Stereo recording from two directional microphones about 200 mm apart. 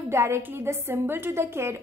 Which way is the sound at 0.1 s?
15° right (ahead or behind).